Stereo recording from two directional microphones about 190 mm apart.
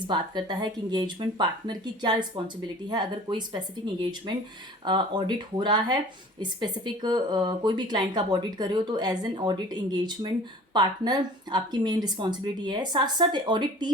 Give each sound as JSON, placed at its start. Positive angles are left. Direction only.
{"t": 0.1, "sound": "speech", "side_deg": -25}